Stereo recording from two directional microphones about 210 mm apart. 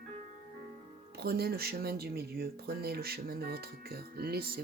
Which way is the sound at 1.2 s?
50° right (ahead or behind).